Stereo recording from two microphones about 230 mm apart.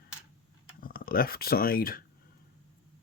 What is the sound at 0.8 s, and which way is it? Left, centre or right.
Speech, left.